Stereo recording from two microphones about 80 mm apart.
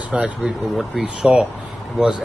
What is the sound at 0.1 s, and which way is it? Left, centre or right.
Speech, centre.